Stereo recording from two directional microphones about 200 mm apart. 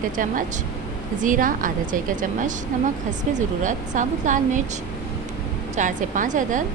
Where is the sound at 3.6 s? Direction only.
40° right (ahead or behind).